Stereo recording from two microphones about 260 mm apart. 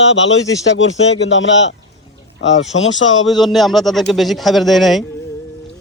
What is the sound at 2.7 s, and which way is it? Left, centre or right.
Speech, left.